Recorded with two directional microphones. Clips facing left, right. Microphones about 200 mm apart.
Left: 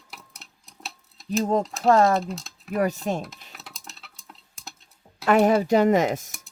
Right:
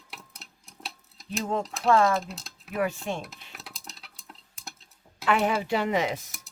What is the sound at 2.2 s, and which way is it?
Speech, centre (ahead or behind).